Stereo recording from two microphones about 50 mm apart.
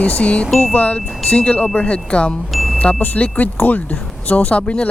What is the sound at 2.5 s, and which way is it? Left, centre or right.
Chime, centre.